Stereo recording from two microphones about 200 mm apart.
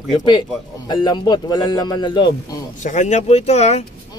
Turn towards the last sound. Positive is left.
turn(degrees=30)  # may be behind; listen again after turning